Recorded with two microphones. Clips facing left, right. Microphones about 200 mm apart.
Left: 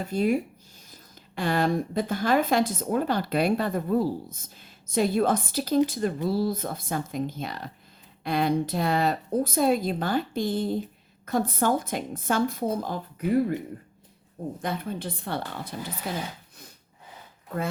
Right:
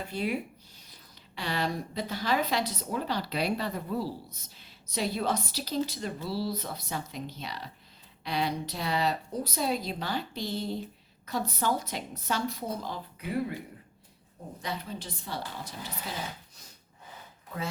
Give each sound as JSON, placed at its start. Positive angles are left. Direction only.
{"t": 0.1, "sound": "a woman's voice", "side_deg": 45}
{"t": 1.4, "sound": "a woman's voice", "side_deg": 50}
{"t": 14.6, "sound": "a woman's voice", "side_deg": 55}